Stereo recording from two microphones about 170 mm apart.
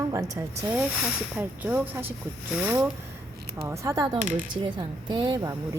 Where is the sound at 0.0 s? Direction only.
20° right (ahead or behind).